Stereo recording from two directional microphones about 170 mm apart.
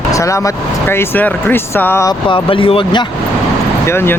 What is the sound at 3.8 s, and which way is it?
Speech, 15° left (ahead or behind).